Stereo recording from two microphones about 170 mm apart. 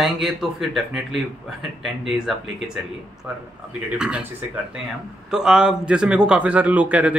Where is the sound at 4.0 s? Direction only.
5° right (ahead or behind).